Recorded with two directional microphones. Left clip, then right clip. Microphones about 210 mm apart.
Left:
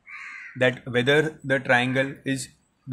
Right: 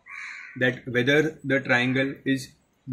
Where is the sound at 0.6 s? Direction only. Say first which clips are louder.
Left 2 dB; 45° left (ahead or behind).